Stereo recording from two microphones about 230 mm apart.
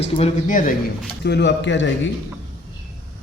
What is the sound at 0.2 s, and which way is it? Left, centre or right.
Speech, left.